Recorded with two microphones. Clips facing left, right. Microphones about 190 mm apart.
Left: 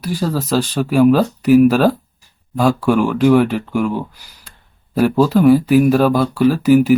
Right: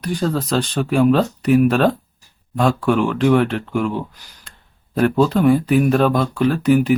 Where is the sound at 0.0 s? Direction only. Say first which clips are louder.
Left 1 dB; 5° left (ahead or behind).